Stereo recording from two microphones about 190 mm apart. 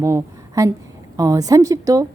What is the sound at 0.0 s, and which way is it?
A woman's voice, 15° right (ahead or behind).